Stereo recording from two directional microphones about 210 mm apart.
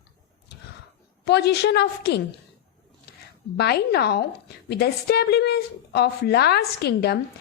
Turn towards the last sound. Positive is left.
turn(degrees=50)  # may be behind; listen again after turning